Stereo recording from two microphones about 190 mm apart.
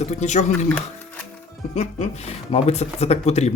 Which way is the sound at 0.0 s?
35° left (ahead or behind).